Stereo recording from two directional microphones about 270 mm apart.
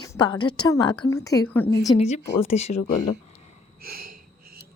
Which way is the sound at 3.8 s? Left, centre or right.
Right.